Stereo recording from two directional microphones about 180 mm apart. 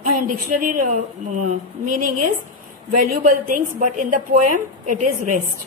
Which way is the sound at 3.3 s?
50° right (ahead or behind).